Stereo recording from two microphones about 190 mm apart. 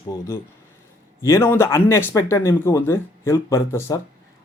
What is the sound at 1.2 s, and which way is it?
Speech, 15° left (ahead or behind).